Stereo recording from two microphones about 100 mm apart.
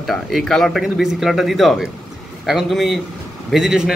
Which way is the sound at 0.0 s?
Centre (ahead or behind).